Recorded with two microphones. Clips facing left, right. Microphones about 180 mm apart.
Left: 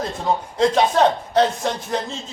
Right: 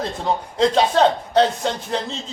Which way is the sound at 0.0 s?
35° right (ahead or behind).